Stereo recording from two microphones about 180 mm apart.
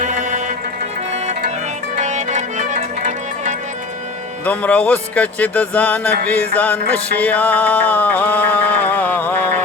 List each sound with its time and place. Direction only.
0.0 s music: 40° right (ahead or behind)
2.0 s music: 40° right (ahead or behind)
4.4 s music: 10° left (ahead or behind)